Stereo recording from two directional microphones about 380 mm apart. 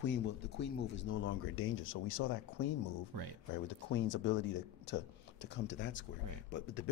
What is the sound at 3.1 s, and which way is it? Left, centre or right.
Speech, right.